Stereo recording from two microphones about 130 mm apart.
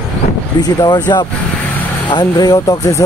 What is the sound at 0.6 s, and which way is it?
Speech, 30° left (ahead or behind).